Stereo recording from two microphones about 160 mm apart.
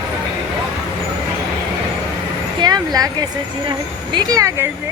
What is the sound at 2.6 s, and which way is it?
A woman's voice, 25° right (ahead or behind).